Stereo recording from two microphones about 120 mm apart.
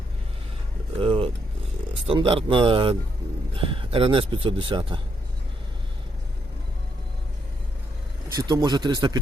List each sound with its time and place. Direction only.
0.9 s a sound: 50° right (ahead or behind)
2.0 s speech: 50° right (ahead or behind)
8.4 s a man's voice: 35° right (ahead or behind)